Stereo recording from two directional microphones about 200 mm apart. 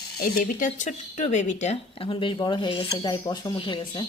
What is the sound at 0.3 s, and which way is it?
Speech, 40° left (ahead or behind).